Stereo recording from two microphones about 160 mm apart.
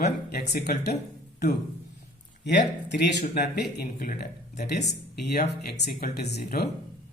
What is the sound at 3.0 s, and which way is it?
Speech, 90° left.